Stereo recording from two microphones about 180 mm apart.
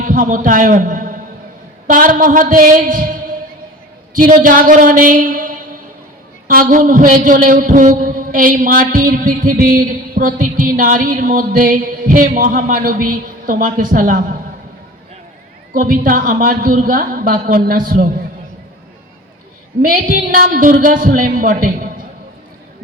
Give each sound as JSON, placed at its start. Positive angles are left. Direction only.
{"t": 0.0, "sound": "a man's voice", "side_deg": -50}
{"t": 15.7, "sound": "a man's voice", "side_deg": -50}
{"t": 19.8, "sound": "a man's voice", "side_deg": -50}